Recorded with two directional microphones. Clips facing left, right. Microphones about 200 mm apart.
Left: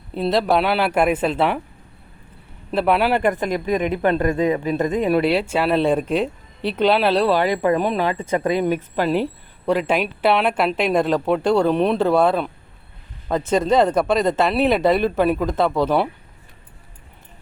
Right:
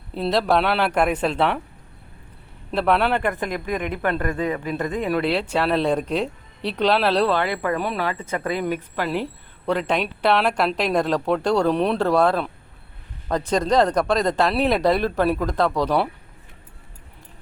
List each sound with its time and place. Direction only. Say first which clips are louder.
0.1 s a woman's voice: left 2 dB; centre (ahead or behind)
2.7 s a woman's voice: left 2 dB; 5° left (ahead or behind)
3.2 s speech: left 5 dB; 20° left (ahead or behind)
9.6 s a woman's voice: left 3 dB; 10° left (ahead or behind)